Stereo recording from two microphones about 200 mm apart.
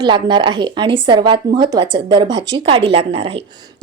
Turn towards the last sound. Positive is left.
turn(degrees=-30)  # may be behind; listen again after turning